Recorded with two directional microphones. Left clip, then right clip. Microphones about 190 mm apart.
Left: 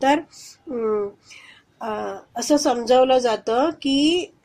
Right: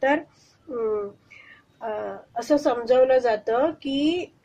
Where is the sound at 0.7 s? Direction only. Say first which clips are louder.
Left 3 dB; 35° left (ahead or behind).